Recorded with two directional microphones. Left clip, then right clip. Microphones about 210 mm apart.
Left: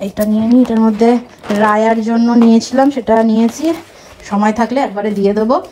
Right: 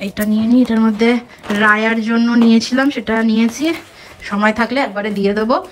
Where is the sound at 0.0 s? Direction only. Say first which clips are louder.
Left 3 dB; 10° left (ahead or behind).